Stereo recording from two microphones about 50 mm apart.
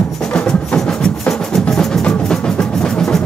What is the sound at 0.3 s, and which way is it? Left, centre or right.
Music, left.